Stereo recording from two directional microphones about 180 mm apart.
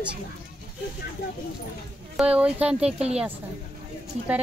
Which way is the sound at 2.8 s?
35° right (ahead or behind).